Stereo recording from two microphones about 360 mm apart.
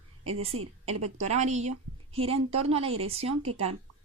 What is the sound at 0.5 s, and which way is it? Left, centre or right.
Speech, right.